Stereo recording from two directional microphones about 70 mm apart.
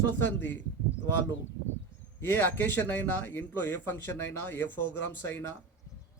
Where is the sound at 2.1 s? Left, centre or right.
Left.